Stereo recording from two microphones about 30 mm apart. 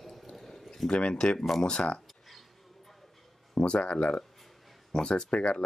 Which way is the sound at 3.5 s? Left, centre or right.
Left.